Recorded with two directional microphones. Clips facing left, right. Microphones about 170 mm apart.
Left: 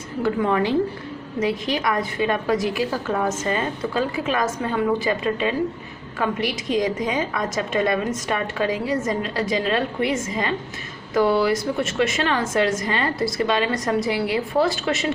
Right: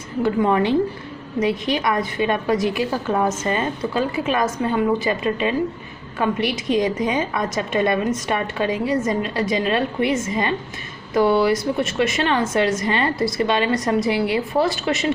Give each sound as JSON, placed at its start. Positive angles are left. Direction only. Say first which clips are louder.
{"t": 0.2, "sound": "a woman's voice", "louder": "right 3 dB", "side_deg": -20}